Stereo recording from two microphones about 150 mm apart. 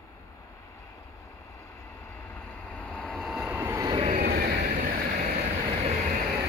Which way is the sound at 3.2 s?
5° right (ahead or behind).